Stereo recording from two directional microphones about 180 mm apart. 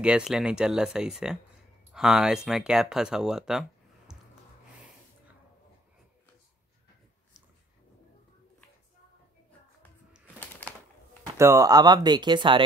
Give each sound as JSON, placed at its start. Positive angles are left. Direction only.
{"t": 0.0, "sound": "speech", "side_deg": -5}
{"t": 4.1, "sound": "gasp", "side_deg": -5}
{"t": 11.3, "sound": "speech", "side_deg": -15}